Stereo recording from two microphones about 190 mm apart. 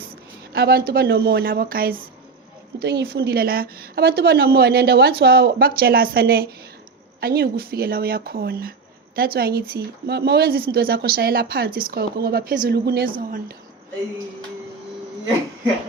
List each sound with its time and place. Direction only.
0.5 s a woman's voice: 55° right (ahead or behind)